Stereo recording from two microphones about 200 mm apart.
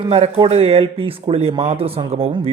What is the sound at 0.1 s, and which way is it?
Speech, 30° right (ahead or behind).